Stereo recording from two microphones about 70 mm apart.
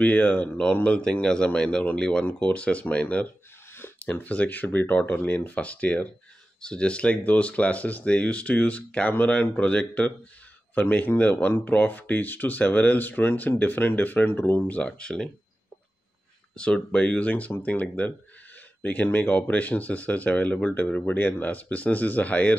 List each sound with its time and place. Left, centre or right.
0.0 s speech: centre
14.8 s speech: centre
16.5 s speech: centre